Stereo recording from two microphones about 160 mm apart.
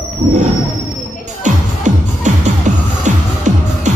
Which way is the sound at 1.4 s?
50° right (ahead or behind).